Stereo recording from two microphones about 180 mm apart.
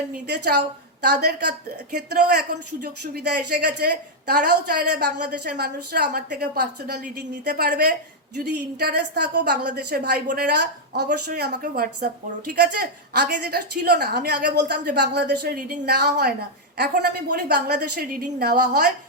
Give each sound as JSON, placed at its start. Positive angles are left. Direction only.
{"t": 0.1, "sound": "a woman's voice", "side_deg": -65}
{"t": 3.0, "sound": "a woman's voice", "side_deg": -65}
{"t": 12.5, "sound": "a woman's voice", "side_deg": -65}